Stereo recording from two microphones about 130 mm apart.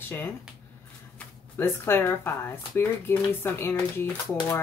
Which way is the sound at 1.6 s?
15° left (ahead or behind).